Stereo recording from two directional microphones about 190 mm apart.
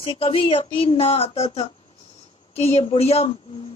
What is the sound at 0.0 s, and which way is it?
Speech, 30° left (ahead or behind).